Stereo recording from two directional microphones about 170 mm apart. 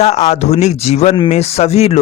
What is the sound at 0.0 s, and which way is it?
Speech, 40° left (ahead or behind).